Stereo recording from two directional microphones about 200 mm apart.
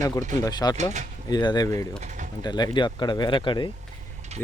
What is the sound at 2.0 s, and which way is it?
Bird, 40° right (ahead or behind).